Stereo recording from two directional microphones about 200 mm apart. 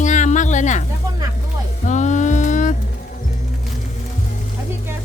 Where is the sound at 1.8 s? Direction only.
35° left (ahead or behind).